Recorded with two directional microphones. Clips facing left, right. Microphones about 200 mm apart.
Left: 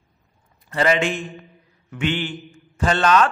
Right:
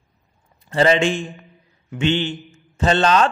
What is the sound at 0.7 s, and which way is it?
A man's voice, 30° right (ahead or behind).